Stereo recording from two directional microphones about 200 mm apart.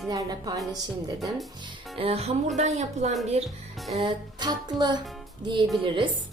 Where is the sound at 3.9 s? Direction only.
25° right (ahead or behind).